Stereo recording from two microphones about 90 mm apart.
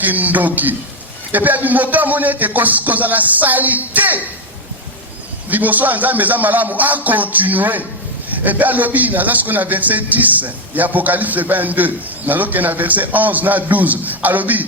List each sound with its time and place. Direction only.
0.0 s a man's voice: 20° right (ahead or behind)
5.5 s a man's voice: 20° right (ahead or behind)